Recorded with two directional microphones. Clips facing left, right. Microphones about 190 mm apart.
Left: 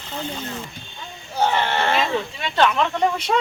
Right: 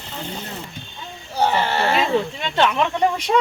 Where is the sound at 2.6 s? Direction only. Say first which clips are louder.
Even; 15° right (ahead or behind).